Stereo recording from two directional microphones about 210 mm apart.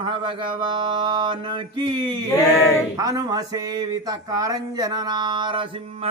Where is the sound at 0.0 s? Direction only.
25° right (ahead or behind).